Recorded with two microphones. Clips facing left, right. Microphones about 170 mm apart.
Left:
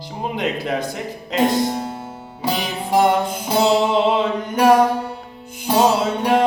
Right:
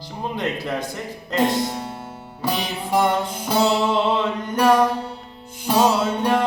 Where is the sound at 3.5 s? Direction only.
15° left (ahead or behind).